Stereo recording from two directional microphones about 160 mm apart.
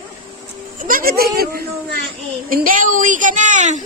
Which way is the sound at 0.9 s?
65° right (ahead or behind).